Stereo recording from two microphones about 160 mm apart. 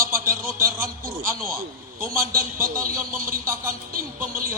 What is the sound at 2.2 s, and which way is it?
Speech, 60° right (ahead or behind).